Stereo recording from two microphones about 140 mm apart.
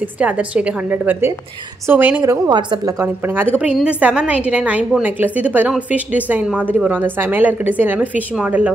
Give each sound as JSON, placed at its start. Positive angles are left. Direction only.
{"t": 0.2, "sound": "a woman's voice", "side_deg": -10}
{"t": 2.2, "sound": "a woman's voice", "side_deg": -25}
{"t": 3.0, "sound": "a woman's voice", "side_deg": -15}